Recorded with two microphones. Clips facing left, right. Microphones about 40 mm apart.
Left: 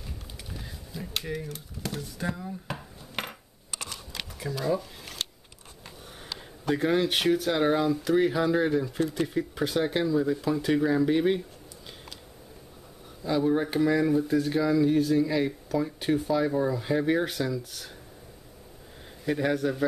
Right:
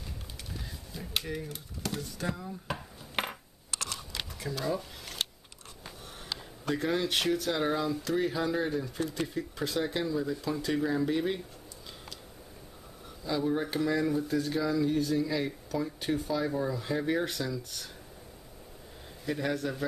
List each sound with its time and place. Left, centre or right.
0.9 s speech: centre
3.2 s coin: centre
4.4 s speech: centre
6.6 s speech: centre
8.5 s speech: left
13.2 s speech: centre
19.2 s speech: centre